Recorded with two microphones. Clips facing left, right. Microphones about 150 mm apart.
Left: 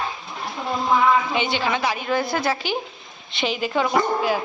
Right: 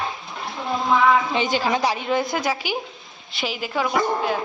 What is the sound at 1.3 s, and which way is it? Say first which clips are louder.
Speech: right 1 dB; 40° right (ahead or behind).